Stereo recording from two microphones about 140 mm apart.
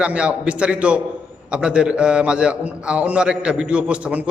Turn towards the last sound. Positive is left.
turn(degrees=-10)  # may be behind; listen again after turning